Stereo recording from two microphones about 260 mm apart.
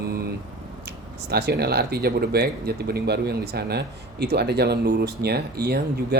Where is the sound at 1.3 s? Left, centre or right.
Right.